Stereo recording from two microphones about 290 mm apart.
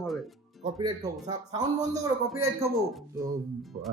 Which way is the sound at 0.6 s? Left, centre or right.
Centre.